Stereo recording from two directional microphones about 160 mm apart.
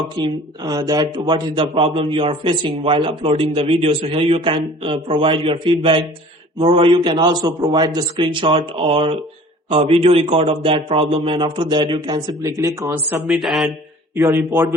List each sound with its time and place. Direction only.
0.2 s a man's voice: 25° right (ahead or behind)
13.2 s speech: centre (ahead or behind)
14.2 s a man's voice: 15° right (ahead or behind)